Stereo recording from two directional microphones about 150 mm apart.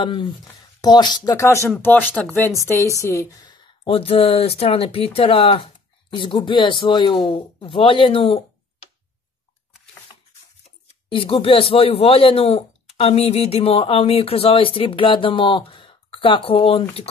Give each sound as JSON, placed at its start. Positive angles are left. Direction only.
{"t": 0.0, "sound": "speech", "side_deg": 35}
{"t": 3.8, "sound": "speech", "side_deg": 40}
{"t": 11.1, "sound": "speech", "side_deg": 35}